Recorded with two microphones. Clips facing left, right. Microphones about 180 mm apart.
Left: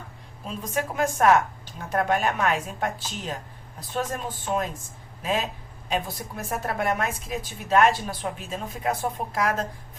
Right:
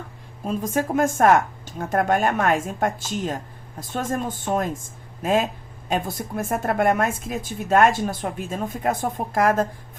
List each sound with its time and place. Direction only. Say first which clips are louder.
0.4 s speech: right 6 dB; 50° right (ahead or behind)
5.9 s speech: right 4 dB; 50° right (ahead or behind)